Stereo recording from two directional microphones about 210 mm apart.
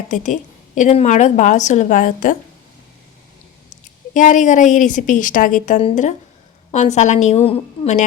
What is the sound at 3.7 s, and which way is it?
A woman's voice, 35° left (ahead or behind).